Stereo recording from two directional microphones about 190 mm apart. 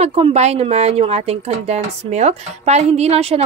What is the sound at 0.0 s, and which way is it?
Speech, 30° right (ahead or behind).